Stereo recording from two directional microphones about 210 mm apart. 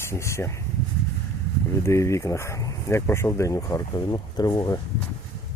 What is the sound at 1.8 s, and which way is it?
Speech, 15° left (ahead or behind).